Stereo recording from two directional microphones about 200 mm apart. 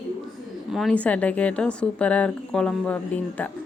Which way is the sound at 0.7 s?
Centre (ahead or behind).